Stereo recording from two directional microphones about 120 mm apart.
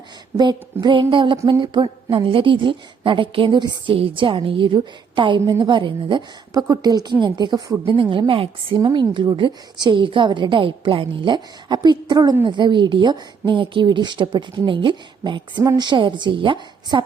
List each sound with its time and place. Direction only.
0.3 s a woman's voice: 35° right (ahead or behind)
6.5 s a woman's voice: 30° right (ahead or behind)
8.1 s a woman's voice: 45° right (ahead or behind)